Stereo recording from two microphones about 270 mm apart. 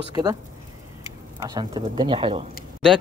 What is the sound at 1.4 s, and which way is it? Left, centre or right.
Speech, centre.